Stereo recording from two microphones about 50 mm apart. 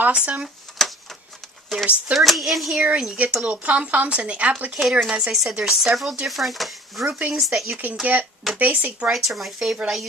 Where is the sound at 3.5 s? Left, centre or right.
Right.